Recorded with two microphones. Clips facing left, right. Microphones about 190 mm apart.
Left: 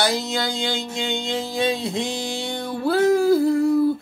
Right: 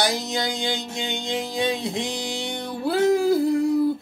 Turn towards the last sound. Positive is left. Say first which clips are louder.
# left 2 dB
turn(degrees=-20)  # may be behind; listen again after turning